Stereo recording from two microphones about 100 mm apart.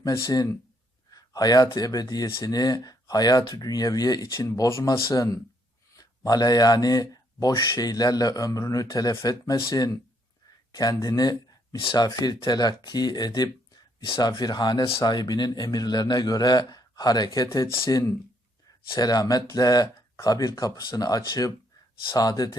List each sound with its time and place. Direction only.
0.0 s speech: 40° left (ahead or behind)
10.8 s a man's voice: 40° left (ahead or behind)